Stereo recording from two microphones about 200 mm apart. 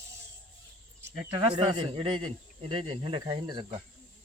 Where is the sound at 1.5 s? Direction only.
25° right (ahead or behind).